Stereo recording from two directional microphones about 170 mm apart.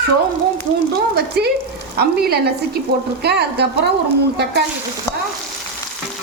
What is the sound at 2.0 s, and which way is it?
Speech, 70° right (ahead or behind).